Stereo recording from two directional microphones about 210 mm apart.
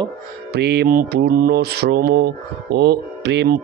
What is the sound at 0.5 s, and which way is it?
Mantra, 50° right (ahead or behind).